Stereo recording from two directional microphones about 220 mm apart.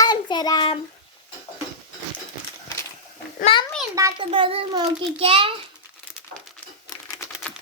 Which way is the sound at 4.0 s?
20° right (ahead or behind).